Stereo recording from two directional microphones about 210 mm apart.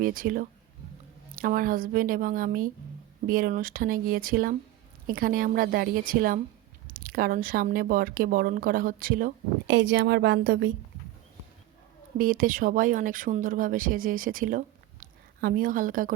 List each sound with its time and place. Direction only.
0.0 s speech: 40° right (ahead or behind)
12.1 s speech: 40° right (ahead or behind)